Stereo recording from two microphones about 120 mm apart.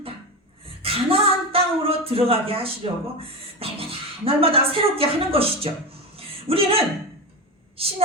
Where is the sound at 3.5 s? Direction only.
55° right (ahead or behind).